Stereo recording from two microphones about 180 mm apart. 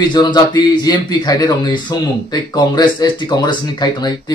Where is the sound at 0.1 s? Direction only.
25° left (ahead or behind).